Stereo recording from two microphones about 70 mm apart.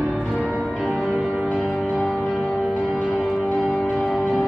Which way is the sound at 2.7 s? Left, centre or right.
Centre.